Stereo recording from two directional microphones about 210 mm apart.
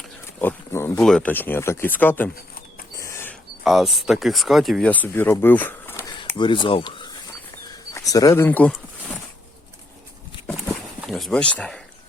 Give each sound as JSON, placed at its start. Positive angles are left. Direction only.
{"t": 0.3, "sound": "speech", "side_deg": 10}
{"t": 2.9, "sound": "a sound", "side_deg": 15}
{"t": 3.6, "sound": "speech", "side_deg": 0}
{"t": 6.2, "sound": "speech", "side_deg": 20}
{"t": 11.0, "sound": "speech", "side_deg": 0}